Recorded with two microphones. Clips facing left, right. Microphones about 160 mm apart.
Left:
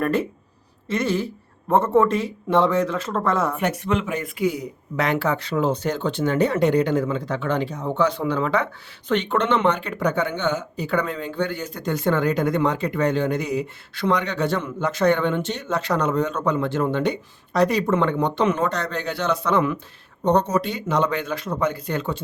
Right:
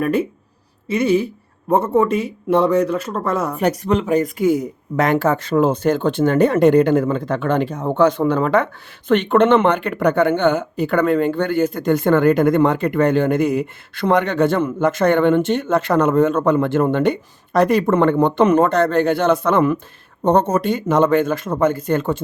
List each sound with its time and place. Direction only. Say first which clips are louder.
0.9 s speech: right 6 dB; 10° right (ahead or behind)
2.0 s speech: right 3 dB; 90° left
3.6 s speech: right 5 dB; 40° right (ahead or behind)